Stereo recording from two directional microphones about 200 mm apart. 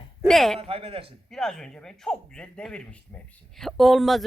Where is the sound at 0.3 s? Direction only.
Centre (ahead or behind).